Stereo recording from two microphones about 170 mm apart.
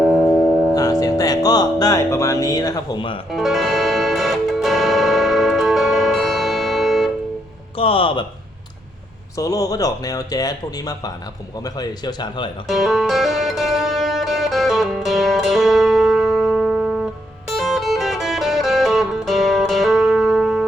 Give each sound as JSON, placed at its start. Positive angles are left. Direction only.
{"t": 0.0, "sound": "music", "side_deg": 0}
{"t": 0.7, "sound": "music", "side_deg": 20}
{"t": 3.3, "sound": "music", "side_deg": 0}
{"t": 7.8, "sound": "speech", "side_deg": 30}
{"t": 9.4, "sound": "speech", "side_deg": 20}
{"t": 12.6, "sound": "music", "side_deg": 0}